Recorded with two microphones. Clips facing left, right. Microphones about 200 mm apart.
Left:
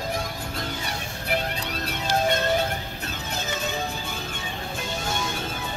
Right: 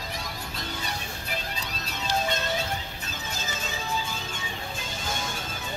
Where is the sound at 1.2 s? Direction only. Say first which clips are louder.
Left 11 dB; 60° left (ahead or behind).